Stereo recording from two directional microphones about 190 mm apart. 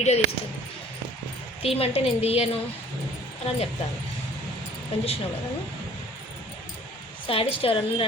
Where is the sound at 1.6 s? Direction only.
30° left (ahead or behind).